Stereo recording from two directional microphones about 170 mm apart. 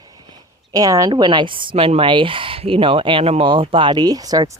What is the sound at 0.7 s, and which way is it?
Speech, 20° right (ahead or behind).